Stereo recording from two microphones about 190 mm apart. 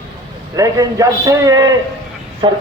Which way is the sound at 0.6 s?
15° right (ahead or behind).